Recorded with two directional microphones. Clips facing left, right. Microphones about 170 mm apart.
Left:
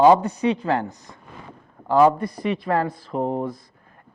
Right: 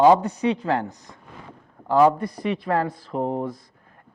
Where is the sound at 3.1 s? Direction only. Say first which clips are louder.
Left 1 dB; 30° left (ahead or behind).